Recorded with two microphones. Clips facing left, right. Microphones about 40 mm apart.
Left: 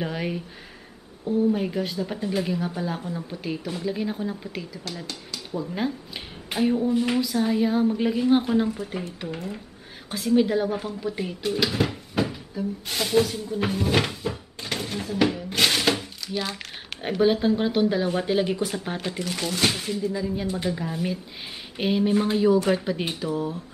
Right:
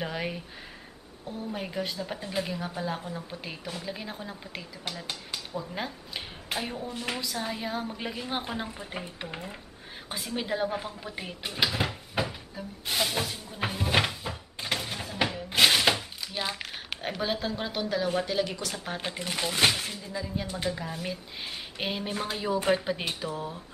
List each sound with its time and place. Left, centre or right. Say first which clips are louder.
0.0 s speech: left 4 dB; centre
1.5 s speech: left 7 dB; centre
8.6 s speech: left 8 dB; centre
11.9 s a sound: left 5 dB; centre
16.3 s speech: left 3 dB; centre
17.0 s speech: left 10 dB; centre
18.2 s speech: left 6 dB; left
18.9 s speech: left 3 dB; centre
19.7 s speech: left 6 dB; centre